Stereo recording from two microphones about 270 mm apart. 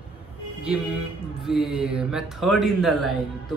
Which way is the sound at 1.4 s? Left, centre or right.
Centre.